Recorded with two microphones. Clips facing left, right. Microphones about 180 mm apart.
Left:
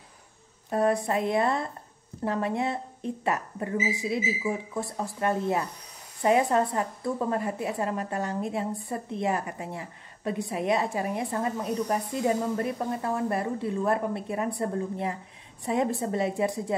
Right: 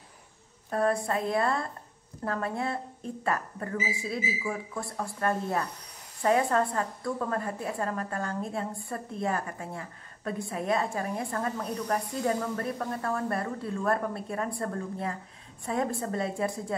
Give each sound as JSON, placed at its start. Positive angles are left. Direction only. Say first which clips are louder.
{"t": 0.7, "sound": "a woman's voice", "louder": "left 2 dB", "side_deg": 20}